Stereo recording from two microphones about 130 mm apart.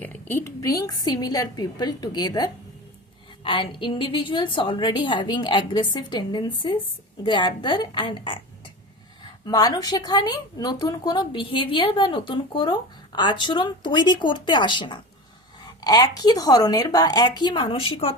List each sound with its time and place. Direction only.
0.0 s a woman's voice: 15° left (ahead or behind); by 18.2 s 45° left (ahead or behind)